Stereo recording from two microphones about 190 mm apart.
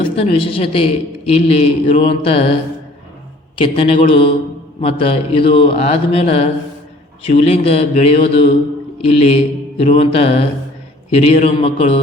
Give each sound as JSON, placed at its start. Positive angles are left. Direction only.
{"t": 0.2, "sound": "a man's voice", "side_deg": 30}
{"t": 3.6, "sound": "a man's voice", "side_deg": 30}